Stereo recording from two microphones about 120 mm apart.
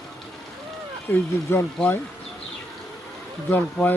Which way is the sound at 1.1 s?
20° left (ahead or behind).